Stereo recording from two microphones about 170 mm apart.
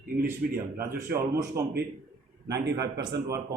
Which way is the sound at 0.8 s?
20° right (ahead or behind).